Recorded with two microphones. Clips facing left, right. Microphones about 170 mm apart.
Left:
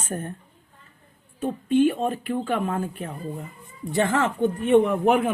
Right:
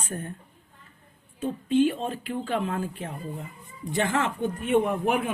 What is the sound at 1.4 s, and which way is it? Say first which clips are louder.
Speech: left 2 dB; 55° left (ahead or behind).